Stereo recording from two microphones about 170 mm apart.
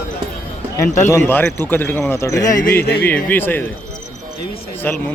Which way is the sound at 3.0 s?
10° left (ahead or behind).